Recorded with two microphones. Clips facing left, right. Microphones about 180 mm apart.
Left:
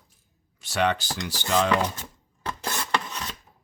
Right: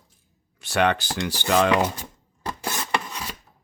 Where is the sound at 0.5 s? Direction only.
60° right (ahead or behind).